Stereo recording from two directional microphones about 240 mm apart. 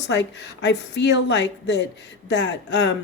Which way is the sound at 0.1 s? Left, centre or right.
Left.